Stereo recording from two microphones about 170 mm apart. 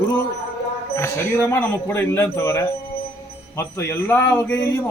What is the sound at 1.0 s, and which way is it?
Speech, 15° left (ahead or behind).